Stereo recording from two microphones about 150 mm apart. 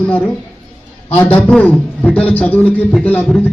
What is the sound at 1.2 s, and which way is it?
A man's voice, 10° left (ahead or behind).